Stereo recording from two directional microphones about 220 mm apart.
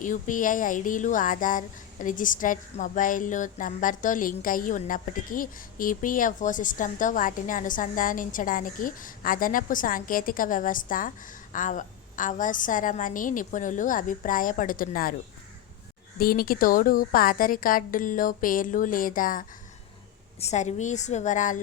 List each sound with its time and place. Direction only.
0.0 s speech: 35° left (ahead or behind)
16.1 s speech: 40° left (ahead or behind)